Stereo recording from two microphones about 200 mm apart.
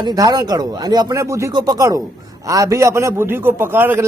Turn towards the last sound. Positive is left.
turn(degrees=-10)  # may be behind; listen again after turning